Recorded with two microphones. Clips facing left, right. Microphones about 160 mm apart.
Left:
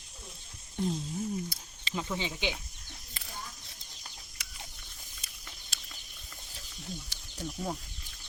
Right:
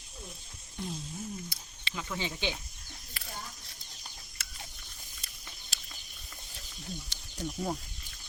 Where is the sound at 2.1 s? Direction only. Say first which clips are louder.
Even; 15° left (ahead or behind).